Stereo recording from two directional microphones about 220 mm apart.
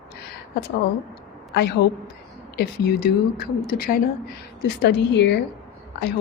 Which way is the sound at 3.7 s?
40° left (ahead or behind).